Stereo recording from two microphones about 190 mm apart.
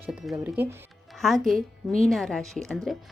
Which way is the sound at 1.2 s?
Centre (ahead or behind).